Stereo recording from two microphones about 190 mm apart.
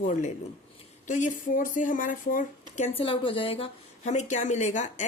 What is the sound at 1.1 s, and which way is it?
Speech, 40° left (ahead or behind).